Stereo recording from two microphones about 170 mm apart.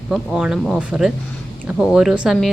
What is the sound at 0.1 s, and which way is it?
A woman's voice, 5° right (ahead or behind).